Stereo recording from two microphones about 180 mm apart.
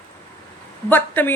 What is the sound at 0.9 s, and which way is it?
Speech, 10° left (ahead or behind).